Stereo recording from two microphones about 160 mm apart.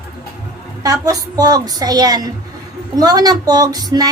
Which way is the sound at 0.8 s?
20° right (ahead or behind).